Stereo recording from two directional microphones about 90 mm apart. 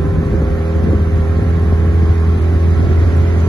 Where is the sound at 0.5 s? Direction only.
65° left (ahead or behind).